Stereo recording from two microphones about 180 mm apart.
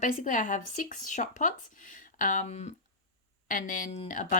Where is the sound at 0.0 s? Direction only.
45° left (ahead or behind).